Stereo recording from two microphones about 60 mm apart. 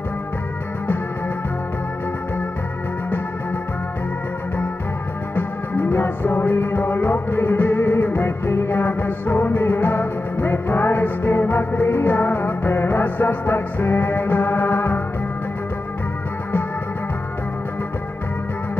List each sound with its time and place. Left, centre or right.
5.3 s music: left